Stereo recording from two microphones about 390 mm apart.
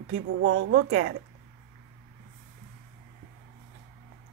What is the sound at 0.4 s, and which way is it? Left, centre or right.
Speech, right.